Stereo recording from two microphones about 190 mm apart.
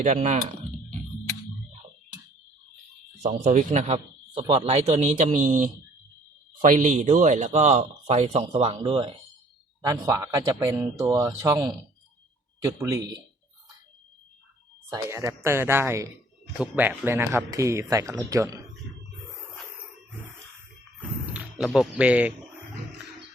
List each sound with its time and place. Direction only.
0.0 s speech: 35° right (ahead or behind)
3.4 s speech: 40° right (ahead or behind)
9.8 s speech: 15° right (ahead or behind)
14.8 s speech: 20° right (ahead or behind)
21.3 s speech: 5° right (ahead or behind)